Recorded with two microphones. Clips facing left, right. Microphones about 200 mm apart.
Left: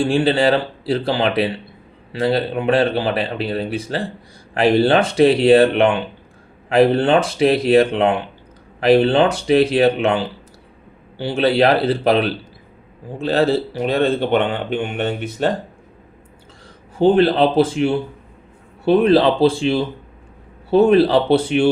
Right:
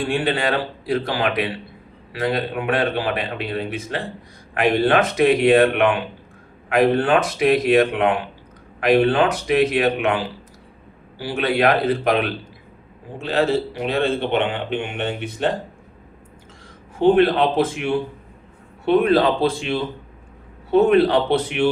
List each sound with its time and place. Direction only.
0.0 s speech: 30° left (ahead or behind)
17.0 s speech: 30° left (ahead or behind)